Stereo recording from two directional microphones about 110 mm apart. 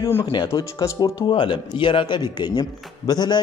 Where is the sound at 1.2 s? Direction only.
45° left (ahead or behind).